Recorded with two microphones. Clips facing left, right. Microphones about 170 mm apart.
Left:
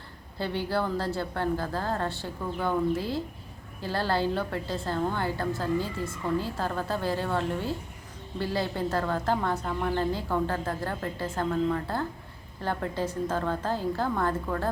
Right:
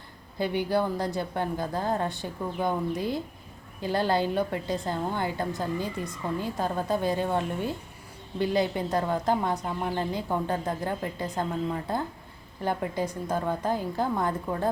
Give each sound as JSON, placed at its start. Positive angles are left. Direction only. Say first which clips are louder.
{"t": 0.3, "sound": "a woman's voice", "louder": "right 3 dB", "side_deg": -15}